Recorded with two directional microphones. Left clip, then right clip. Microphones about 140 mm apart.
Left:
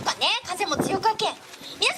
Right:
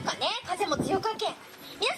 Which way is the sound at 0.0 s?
15° left (ahead or behind).